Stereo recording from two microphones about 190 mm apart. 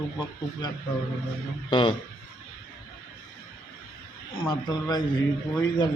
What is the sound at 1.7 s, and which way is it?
Speech, 25° left (ahead or behind).